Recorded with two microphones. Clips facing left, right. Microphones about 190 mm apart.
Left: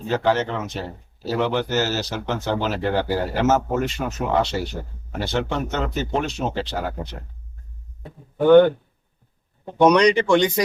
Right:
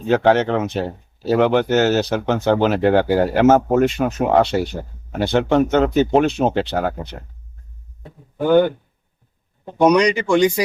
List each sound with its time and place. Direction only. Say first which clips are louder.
0.1 s speech: right 6 dB; 65° right (ahead or behind)
8.4 s speech: left 2 dB; 10° right (ahead or behind)
9.8 s speech: right 1 dB; 10° right (ahead or behind)